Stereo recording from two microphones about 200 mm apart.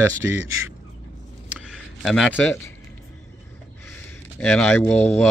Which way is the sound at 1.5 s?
Centre (ahead or behind).